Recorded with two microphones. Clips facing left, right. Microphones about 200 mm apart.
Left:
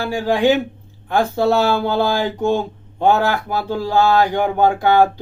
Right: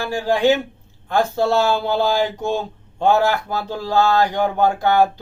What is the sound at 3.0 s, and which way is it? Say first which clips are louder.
Speech: left 1 dB; 15° left (ahead or behind).